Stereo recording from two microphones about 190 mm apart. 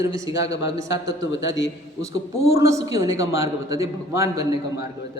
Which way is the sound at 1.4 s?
75° left (ahead or behind).